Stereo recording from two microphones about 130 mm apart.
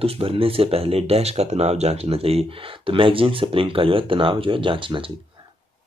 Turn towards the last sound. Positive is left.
turn(degrees=-40)  # may be behind; listen again after turning